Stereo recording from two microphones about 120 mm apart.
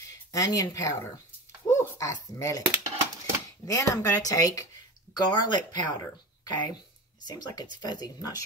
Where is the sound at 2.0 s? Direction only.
25° left (ahead or behind).